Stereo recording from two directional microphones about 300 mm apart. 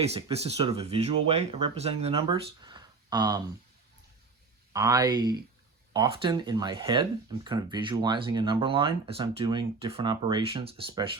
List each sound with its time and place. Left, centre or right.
0.1 s speech: centre
4.7 s speech: centre